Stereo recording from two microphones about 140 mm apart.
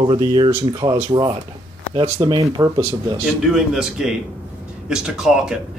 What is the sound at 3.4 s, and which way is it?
Speech, 5° right (ahead or behind).